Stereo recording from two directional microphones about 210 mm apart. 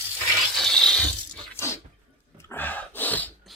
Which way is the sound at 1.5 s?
10° left (ahead or behind).